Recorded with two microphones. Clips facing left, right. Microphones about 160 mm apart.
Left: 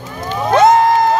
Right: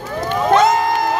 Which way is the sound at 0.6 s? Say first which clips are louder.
Left 5 dB; 30° left (ahead or behind).